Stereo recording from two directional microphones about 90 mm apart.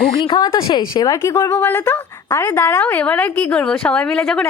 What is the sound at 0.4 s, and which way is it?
Speech, 60° left (ahead or behind).